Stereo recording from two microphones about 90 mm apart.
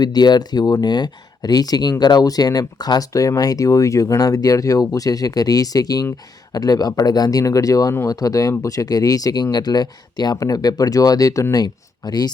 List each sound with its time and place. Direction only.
0.0 s speech: 50° left (ahead or behind)